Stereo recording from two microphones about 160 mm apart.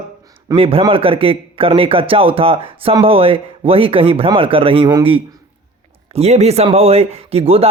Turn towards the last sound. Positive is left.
turn(degrees=-40)  # may be behind; listen again after turning